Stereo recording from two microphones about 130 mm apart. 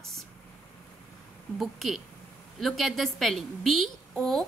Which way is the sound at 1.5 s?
Centre (ahead or behind).